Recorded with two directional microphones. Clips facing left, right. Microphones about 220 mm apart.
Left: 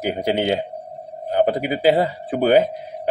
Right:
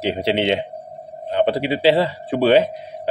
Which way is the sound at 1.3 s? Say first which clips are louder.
Even; 80° right.